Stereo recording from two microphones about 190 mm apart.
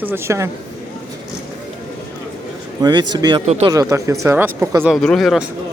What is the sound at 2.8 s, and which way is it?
A man's voice, 20° right (ahead or behind).